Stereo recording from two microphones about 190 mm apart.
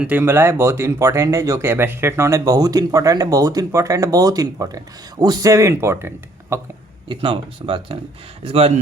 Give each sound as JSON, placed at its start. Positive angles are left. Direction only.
{"t": 0.0, "sound": "speech", "side_deg": -10}
{"t": 7.1, "sound": "speech", "side_deg": -25}